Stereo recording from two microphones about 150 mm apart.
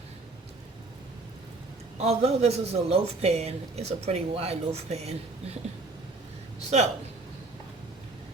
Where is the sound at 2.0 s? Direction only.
40° right (ahead or behind).